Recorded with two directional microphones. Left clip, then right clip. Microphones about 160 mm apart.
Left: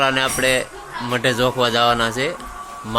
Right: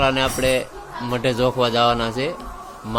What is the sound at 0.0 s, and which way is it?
Speech, centre (ahead or behind).